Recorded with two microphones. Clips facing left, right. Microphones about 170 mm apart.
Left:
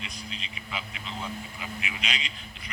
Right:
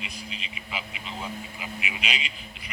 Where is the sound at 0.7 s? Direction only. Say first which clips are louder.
Right 1 dB; 10° right (ahead or behind).